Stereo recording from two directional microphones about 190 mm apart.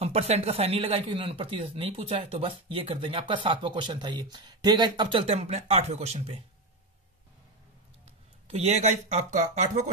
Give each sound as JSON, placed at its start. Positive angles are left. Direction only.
{"t": 0.0, "sound": "speech", "side_deg": -35}
{"t": 8.0, "sound": "speech", "side_deg": -35}